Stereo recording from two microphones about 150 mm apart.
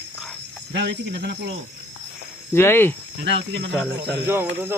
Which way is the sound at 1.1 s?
90° right.